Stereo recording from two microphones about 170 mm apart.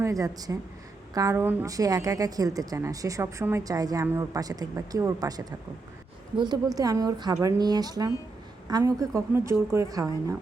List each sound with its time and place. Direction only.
0.0 s a woman's voice: 20° right (ahead or behind)